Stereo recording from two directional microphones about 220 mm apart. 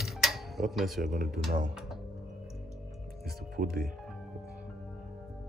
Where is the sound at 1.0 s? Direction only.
35° right (ahead or behind).